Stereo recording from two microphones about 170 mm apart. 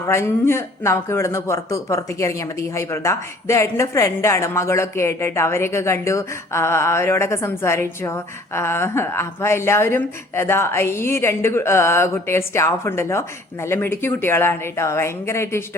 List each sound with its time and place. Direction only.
0.0 s a woman's voice: 15° left (ahead or behind)